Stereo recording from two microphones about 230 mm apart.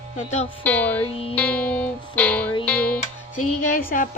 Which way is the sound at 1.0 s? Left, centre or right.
Left.